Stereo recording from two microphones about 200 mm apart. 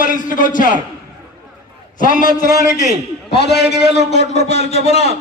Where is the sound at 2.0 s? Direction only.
40° left (ahead or behind).